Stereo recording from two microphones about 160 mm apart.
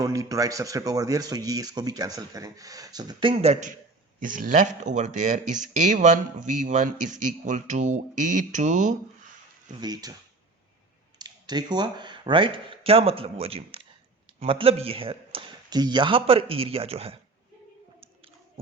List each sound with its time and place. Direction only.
0.0 s speech: 20° right (ahead or behind); by 3.8 s 45° right (ahead or behind)
4.2 s speech: 55° right (ahead or behind)
9.8 s speech: 25° right (ahead or behind)
11.2 s speech: 25° right (ahead or behind)